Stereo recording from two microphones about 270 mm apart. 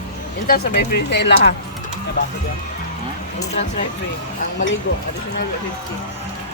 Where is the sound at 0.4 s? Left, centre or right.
Left.